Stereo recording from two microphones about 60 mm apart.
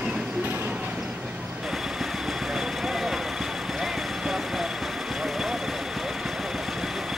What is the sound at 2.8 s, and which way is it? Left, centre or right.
Vehicle, centre.